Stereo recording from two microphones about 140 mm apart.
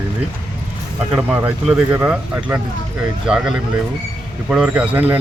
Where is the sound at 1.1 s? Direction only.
10° right (ahead or behind).